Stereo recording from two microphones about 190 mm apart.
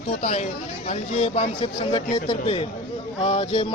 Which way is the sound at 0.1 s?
35° left (ahead or behind).